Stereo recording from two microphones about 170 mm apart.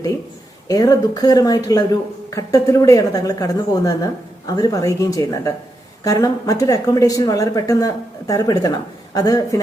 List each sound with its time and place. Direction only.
0.7 s speech: 20° left (ahead or behind)